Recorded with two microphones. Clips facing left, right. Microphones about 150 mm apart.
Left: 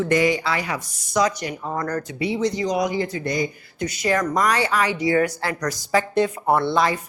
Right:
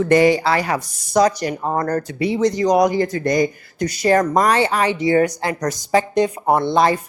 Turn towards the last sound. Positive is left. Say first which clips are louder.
# right 3 dB
turn(degrees=-15)  # may be behind; listen again after turning